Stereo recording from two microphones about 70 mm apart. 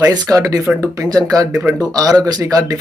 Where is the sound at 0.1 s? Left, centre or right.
Right.